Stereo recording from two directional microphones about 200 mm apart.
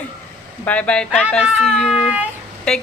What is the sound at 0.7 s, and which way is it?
Speech, 5° left (ahead or behind).